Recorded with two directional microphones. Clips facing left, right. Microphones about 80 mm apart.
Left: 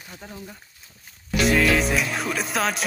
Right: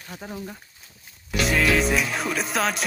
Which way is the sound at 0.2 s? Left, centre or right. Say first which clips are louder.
Right 5 dB; centre.